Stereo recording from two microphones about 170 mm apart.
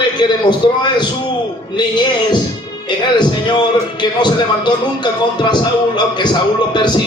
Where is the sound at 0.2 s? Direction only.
25° left (ahead or behind).